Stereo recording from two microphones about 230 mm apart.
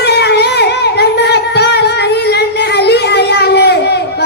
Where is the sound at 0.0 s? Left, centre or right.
Left.